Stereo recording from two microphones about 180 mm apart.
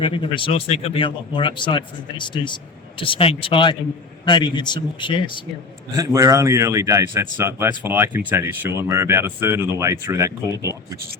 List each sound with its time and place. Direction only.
0.0 s speech: 30° left (ahead or behind)
6.0 s speech: 20° right (ahead or behind)